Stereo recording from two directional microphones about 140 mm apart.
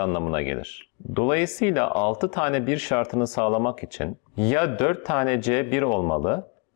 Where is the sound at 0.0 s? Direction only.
20° left (ahead or behind).